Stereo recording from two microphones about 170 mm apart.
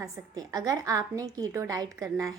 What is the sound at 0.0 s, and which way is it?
Speech, 20° right (ahead or behind).